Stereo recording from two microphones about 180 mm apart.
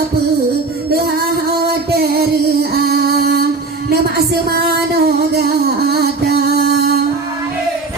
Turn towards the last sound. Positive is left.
turn(degrees=-60)  # may be behind; listen again after turning